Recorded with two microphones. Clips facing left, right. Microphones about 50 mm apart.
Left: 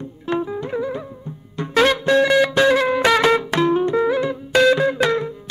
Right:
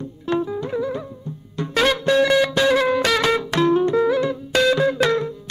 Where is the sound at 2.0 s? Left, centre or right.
Centre.